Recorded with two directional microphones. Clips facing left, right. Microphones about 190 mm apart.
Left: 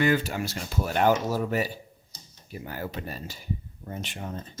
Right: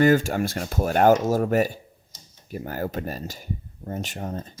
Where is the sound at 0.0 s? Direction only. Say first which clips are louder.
Right 6 dB; 45° right (ahead or behind).